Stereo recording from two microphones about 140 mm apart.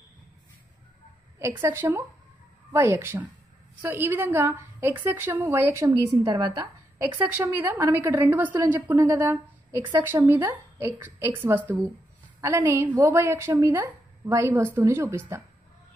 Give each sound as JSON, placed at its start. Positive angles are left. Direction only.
{"t": 1.4, "sound": "a woman's voice", "side_deg": -20}
{"t": 7.2, "sound": "a woman's voice", "side_deg": -15}